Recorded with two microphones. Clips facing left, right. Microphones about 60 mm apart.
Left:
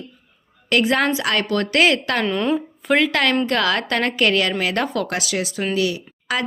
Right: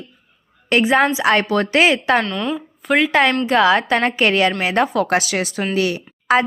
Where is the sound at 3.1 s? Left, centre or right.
Right.